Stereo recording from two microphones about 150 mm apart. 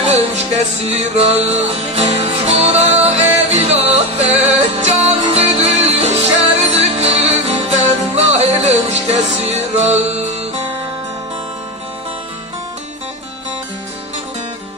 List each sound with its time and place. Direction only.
0.7 s music: 45° right (ahead or behind)